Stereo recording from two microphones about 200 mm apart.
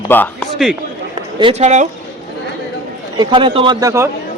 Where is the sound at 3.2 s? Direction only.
25° right (ahead or behind).